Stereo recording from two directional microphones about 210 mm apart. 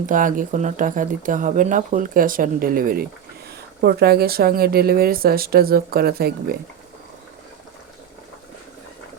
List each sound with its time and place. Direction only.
0.0 s a woman's voice: 40° right (ahead or behind)